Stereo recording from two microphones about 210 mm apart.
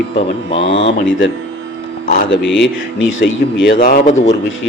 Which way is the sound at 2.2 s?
65° left (ahead or behind).